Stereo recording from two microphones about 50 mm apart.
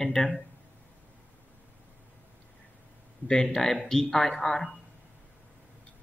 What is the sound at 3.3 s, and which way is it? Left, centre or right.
Speech, centre.